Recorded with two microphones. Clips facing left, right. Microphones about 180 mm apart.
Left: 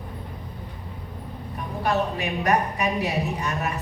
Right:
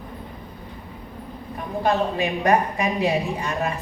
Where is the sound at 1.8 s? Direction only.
30° right (ahead or behind).